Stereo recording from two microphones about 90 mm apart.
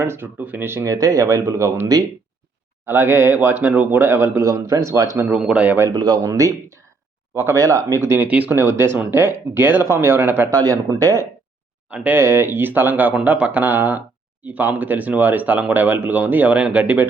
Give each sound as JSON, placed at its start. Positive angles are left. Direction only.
{"t": 0.0, "sound": "speech", "side_deg": -30}
{"t": 0.9, "sound": "speech", "side_deg": -40}
{"t": 2.8, "sound": "speech", "side_deg": -25}
{"t": 4.4, "sound": "speech", "side_deg": -35}
{"t": 5.1, "sound": "speech", "side_deg": -25}
{"t": 5.4, "sound": "speech", "side_deg": -15}
{"t": 5.9, "sound": "speech", "side_deg": -50}
{"t": 8.3, "sound": "speech", "side_deg": -15}
{"t": 8.5, "sound": "speech", "side_deg": -25}
{"t": 10.5, "sound": "speech", "side_deg": -45}
{"t": 11.9, "sound": "speech", "side_deg": -15}
{"t": 12.2, "sound": "speech", "side_deg": -25}